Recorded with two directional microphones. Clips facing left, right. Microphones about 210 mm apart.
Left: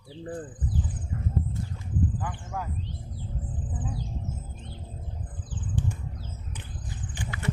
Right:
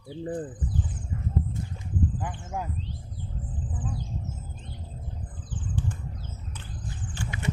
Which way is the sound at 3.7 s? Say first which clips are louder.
Even; 20° left (ahead or behind).